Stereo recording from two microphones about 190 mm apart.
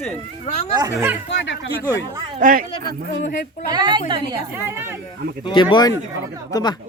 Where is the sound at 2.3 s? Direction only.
45° right (ahead or behind).